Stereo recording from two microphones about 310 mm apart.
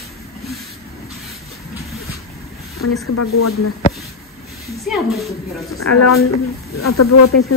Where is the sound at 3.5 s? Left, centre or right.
Left.